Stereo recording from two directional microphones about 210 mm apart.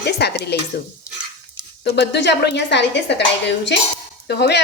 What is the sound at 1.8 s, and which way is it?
A woman's voice, 55° left (ahead or behind).